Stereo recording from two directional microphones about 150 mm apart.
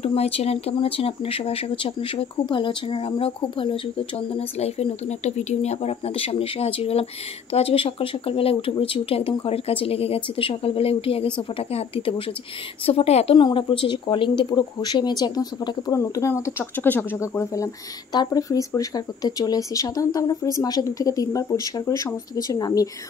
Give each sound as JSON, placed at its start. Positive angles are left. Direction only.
{"t": 0.0, "sound": "speech", "side_deg": 45}